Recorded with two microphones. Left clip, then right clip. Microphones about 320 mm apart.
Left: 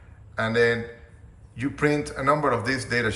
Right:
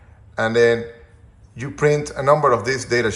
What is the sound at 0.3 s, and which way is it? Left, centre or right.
A man's voice, centre.